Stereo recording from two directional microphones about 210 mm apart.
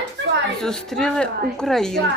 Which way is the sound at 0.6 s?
5° left (ahead or behind).